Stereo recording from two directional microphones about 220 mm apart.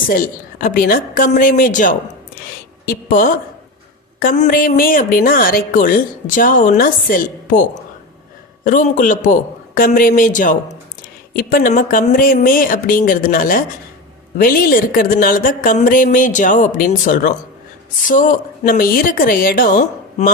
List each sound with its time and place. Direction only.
0.1 s a woman's voice: 40° left (ahead or behind)